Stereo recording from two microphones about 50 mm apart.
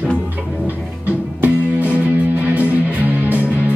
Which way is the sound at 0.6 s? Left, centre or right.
Right.